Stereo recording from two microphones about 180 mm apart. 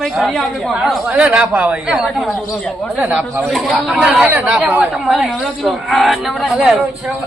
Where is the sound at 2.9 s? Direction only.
10° right (ahead or behind).